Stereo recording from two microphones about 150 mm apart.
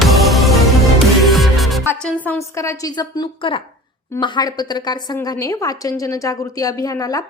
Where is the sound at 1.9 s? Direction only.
10° left (ahead or behind); by 3.6 s 30° left (ahead or behind).